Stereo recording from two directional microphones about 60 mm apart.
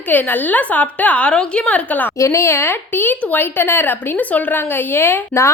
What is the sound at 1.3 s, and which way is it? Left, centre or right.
Speech, centre.